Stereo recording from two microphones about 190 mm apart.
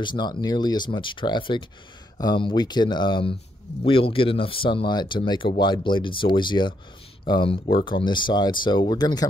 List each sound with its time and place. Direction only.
0.0 s speech: 25° left (ahead or behind)